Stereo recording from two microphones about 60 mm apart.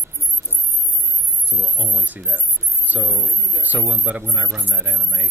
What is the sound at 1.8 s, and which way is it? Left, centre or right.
A man's voice, right.